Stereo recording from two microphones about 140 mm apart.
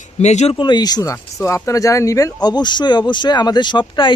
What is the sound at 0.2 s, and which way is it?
Speech, 55° left (ahead or behind).